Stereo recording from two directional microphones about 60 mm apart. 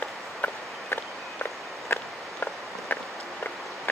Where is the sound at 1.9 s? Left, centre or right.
Left.